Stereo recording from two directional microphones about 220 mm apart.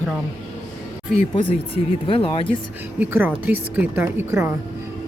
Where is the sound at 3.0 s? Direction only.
5° right (ahead or behind).